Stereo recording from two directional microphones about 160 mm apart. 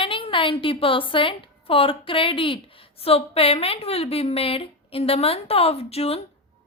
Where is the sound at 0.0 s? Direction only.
35° left (ahead or behind).